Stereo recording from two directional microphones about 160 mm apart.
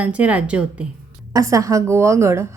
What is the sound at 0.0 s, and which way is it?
Speech, 10° right (ahead or behind).